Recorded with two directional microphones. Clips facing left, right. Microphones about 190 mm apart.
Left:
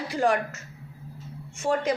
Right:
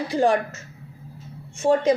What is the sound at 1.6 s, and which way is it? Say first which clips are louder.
Speech: right 6 dB; 25° right (ahead or behind).